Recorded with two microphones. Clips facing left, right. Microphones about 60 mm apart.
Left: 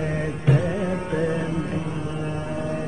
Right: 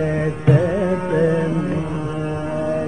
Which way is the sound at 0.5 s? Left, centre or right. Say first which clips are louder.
Right 6 dB; right.